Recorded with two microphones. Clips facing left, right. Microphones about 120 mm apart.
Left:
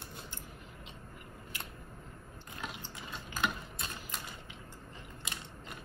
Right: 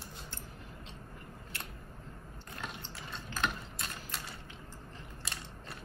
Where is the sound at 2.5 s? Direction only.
15° left (ahead or behind).